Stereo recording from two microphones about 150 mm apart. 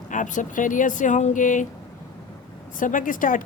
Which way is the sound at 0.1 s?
60° left (ahead or behind).